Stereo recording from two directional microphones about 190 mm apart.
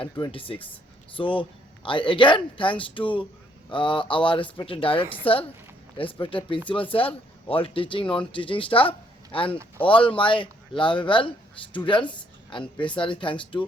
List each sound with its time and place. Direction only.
0.0 s speech: 30° left (ahead or behind)